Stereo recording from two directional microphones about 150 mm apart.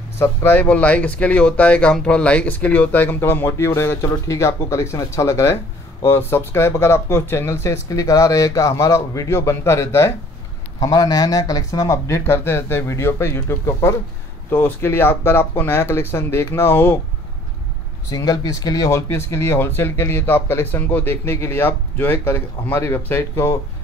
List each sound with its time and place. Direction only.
0.2 s speech: 15° left (ahead or behind)
18.1 s speech: 25° left (ahead or behind)